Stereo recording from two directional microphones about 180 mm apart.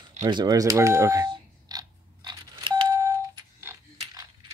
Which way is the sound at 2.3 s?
25° right (ahead or behind).